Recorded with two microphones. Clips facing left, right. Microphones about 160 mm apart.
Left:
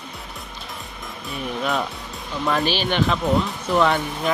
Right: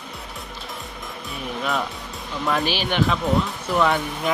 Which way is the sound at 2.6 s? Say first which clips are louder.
Left 2 dB; 10° right (ahead or behind).